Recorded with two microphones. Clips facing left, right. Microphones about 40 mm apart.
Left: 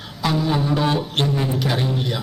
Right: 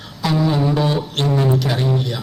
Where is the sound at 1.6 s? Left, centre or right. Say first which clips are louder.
Right 1 dB; centre.